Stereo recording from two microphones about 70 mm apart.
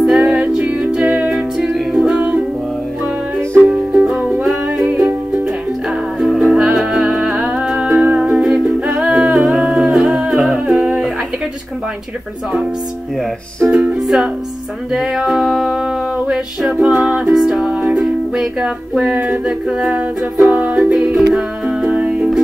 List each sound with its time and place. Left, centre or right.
0.0 s music: centre
3.6 s music: centre
6.1 s music: centre
8.0 s music: centre
8.3 s music: centre
13.7 s music: centre
16.8 s music: centre
20.4 s music: centre
20.9 s music: centre
21.4 s music: centre